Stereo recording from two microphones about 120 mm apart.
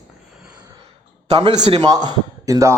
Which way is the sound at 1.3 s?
35° right (ahead or behind).